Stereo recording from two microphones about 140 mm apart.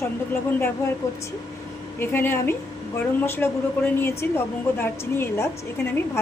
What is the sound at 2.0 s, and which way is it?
A woman's voice, 15° left (ahead or behind).